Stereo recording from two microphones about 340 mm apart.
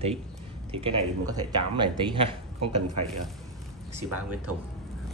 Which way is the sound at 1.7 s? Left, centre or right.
Centre.